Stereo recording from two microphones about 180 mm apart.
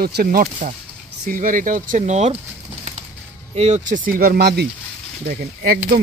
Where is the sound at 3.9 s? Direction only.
50° right (ahead or behind).